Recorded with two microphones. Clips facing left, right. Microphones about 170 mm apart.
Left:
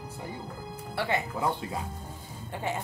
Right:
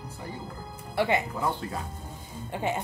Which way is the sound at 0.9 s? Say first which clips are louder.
Right 4 dB; 15° right (ahead or behind).